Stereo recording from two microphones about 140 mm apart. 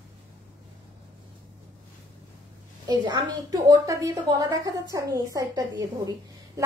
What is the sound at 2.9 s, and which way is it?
A woman's voice, 30° right (ahead or behind).